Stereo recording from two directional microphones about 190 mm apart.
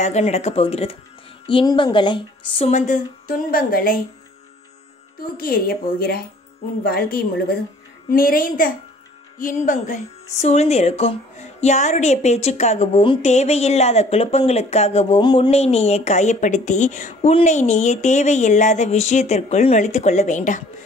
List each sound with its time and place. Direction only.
0.0 s a woman's voice: 35° left (ahead or behind)
5.4 s a woman's voice: 50° left (ahead or behind)